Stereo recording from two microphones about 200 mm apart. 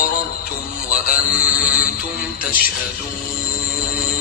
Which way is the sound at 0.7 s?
45° left (ahead or behind).